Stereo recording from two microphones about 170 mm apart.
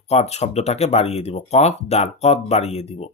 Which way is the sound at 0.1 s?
40° left (ahead or behind).